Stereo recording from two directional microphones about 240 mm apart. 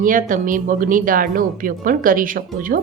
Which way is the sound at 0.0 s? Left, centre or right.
Right.